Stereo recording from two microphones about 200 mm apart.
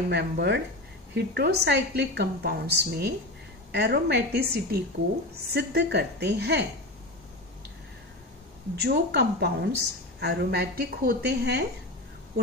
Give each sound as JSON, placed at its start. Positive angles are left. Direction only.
{"t": 0.1, "sound": "a woman's voice", "side_deg": -55}
{"t": 8.7, "sound": "a woman's voice", "side_deg": -55}